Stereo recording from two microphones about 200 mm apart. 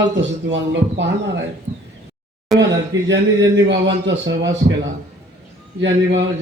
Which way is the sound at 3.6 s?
65° right (ahead or behind).